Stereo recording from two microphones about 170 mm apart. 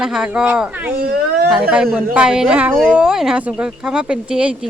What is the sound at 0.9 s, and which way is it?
Speech, 65° right (ahead or behind).